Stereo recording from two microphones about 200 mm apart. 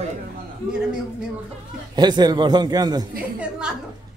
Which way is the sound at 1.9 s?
20° right (ahead or behind).